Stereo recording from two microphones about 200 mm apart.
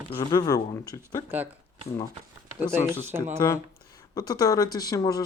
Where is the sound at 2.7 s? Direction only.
10° right (ahead or behind).